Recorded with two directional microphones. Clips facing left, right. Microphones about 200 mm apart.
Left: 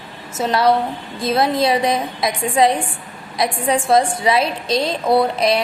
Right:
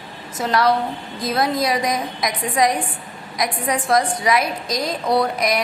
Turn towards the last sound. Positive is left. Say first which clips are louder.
# left 3 dB
turn(degrees=30)  # may be behind; listen again after turning